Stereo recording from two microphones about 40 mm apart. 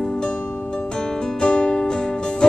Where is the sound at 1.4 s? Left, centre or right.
Centre.